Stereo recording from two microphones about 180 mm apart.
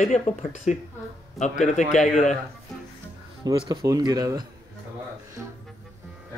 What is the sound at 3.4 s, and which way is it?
Speech, 20° right (ahead or behind).